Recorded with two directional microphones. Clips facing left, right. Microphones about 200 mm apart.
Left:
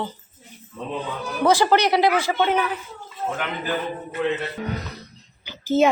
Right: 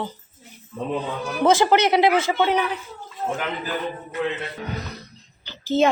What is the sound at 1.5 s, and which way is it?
Speech, 20° right (ahead or behind).